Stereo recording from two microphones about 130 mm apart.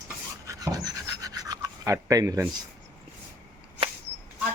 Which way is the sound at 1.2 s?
30° right (ahead or behind).